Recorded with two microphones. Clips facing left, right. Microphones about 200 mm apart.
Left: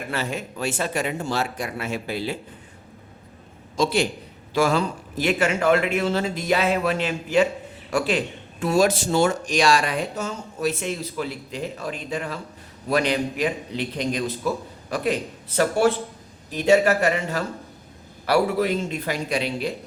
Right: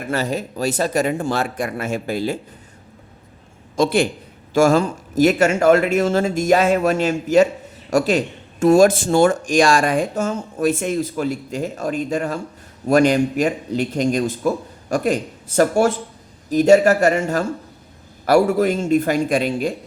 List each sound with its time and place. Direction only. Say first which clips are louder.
0.1 s speech: right 7 dB; 40° right (ahead or behind)
3.8 s speech: right 5 dB; 55° right (ahead or behind)